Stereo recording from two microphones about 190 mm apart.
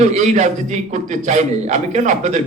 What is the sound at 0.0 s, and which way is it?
A man's voice, 35° right (ahead or behind).